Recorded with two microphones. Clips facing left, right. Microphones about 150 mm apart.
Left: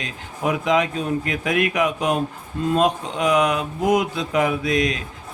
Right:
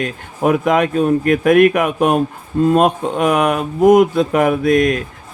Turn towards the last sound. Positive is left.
turn(degrees=-55)  # may be behind; listen again after turning